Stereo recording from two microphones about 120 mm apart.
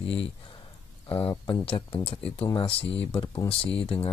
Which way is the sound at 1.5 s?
50° left (ahead or behind).